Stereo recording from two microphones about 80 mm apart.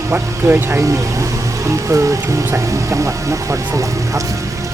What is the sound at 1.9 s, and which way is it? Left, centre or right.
Speech, right.